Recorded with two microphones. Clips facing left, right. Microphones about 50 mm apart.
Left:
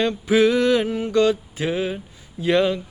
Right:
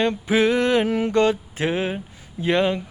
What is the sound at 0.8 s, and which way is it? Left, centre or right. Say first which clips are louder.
Mantra: right 3 dB; right.